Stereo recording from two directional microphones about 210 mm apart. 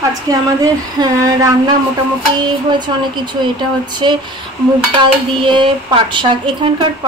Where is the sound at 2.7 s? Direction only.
20° right (ahead or behind).